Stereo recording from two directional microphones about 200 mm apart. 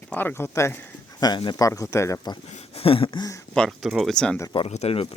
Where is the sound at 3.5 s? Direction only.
Centre (ahead or behind).